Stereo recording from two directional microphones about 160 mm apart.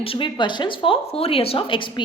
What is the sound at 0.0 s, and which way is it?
A woman's voice, 35° left (ahead or behind).